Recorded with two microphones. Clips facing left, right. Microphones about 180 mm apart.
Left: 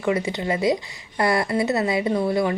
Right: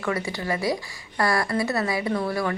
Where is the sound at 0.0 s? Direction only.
20° left (ahead or behind).